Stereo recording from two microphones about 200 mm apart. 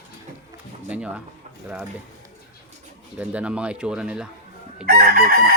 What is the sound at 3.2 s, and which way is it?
Chicken, 5° right (ahead or behind).